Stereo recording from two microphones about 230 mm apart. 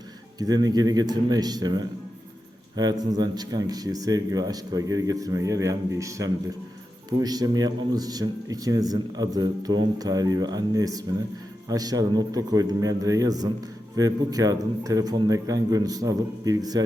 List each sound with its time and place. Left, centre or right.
0.3 s a man's voice: centre